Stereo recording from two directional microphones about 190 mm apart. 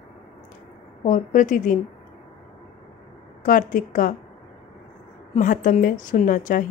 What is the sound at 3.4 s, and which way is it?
Speech, 45° left (ahead or behind).